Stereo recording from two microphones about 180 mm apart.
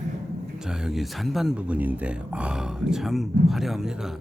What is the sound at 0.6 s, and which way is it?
A man's voice, 5° right (ahead or behind).